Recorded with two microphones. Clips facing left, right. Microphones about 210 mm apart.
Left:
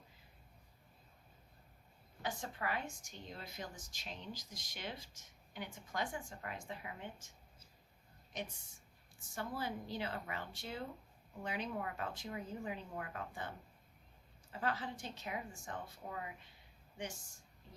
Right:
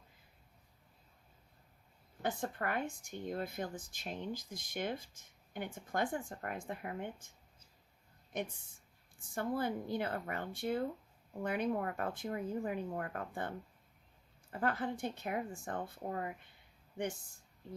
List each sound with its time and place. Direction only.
2.2 s speech: 55° right (ahead or behind)
8.3 s speech: 55° right (ahead or behind)
14.5 s speech: 55° right (ahead or behind)